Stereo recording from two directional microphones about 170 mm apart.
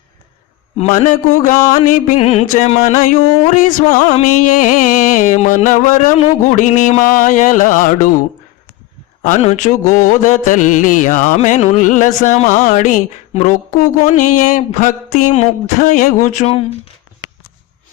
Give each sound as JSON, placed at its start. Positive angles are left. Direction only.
{"t": 0.8, "sound": "mantra", "side_deg": 45}
{"t": 2.1, "sound": "music", "side_deg": 40}
{"t": 3.5, "sound": "mantra", "side_deg": 50}
{"t": 9.2, "sound": "mantra", "side_deg": 45}